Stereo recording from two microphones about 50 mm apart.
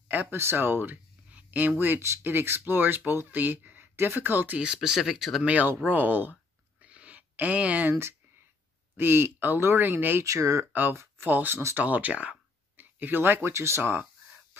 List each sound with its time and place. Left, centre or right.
0.3 s speech: right
1.3 s speech: right
2.2 s speech: right
3.9 s speech: right
4.8 s speech: centre
5.4 s speech: right
6.8 s a sound: right
8.9 s speech: right
10.2 s speech: right
10.7 s speech: right
13.5 s speech: right